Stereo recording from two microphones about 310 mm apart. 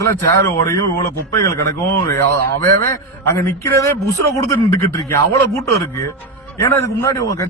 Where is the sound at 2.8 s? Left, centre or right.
Right.